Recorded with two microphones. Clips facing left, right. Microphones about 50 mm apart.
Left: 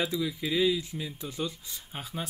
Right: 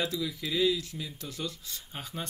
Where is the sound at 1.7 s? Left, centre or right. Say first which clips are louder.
Left 1 dB; centre.